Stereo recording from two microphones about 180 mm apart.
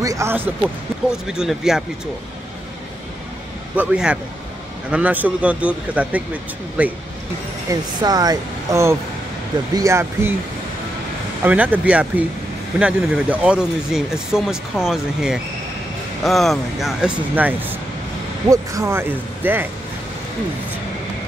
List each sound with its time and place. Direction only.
0.0 s speech: 15° right (ahead or behind)
1.2 s speech: 5° right (ahead or behind)
3.7 s a man's voice: 5° right (ahead or behind)
8.0 s a man's voice: 20° right (ahead or behind)
11.4 s a man's voice: 10° right (ahead or behind)